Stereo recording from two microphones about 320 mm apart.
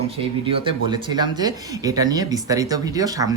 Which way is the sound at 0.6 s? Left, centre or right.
Centre.